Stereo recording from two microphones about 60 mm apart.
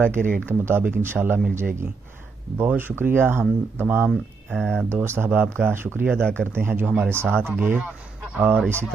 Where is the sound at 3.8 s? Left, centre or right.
Right.